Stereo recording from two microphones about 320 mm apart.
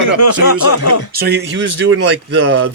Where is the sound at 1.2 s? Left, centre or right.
Right.